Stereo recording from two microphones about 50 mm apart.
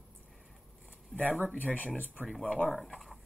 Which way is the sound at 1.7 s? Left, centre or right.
Left.